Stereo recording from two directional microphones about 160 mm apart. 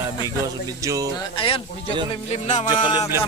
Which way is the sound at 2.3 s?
45° left (ahead or behind).